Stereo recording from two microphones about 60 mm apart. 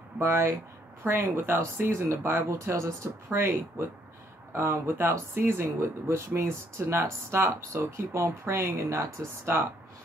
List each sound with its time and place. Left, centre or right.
0.2 s speech: right
4.6 s speech: right